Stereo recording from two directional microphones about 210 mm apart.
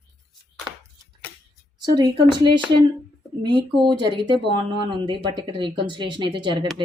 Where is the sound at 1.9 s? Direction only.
20° right (ahead or behind).